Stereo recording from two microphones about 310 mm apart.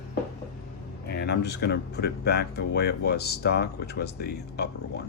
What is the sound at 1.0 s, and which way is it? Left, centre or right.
Speech, left.